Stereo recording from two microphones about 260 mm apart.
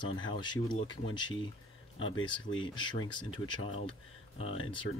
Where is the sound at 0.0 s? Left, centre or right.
Centre.